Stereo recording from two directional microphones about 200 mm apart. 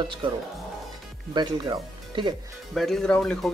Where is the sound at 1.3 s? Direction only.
20° right (ahead or behind).